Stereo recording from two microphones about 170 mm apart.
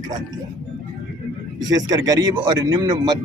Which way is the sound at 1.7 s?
20° right (ahead or behind).